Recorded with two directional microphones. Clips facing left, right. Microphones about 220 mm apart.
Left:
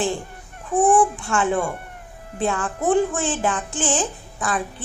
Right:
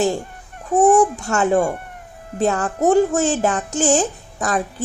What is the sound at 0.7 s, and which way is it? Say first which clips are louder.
A woman's voice: right 3 dB; 40° right (ahead or behind).